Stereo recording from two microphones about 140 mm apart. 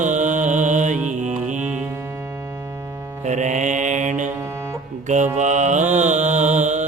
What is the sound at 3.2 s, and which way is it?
Mantra, 60° right (ahead or behind).